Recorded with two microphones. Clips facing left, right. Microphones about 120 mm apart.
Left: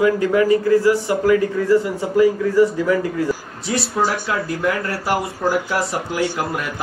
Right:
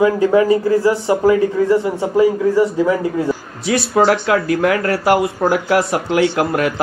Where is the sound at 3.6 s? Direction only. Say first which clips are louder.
Right 7 dB; 65° right (ahead or behind).